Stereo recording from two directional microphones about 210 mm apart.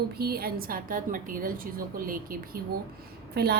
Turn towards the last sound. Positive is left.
turn(degrees=-50)  # may be behind; listen again after turning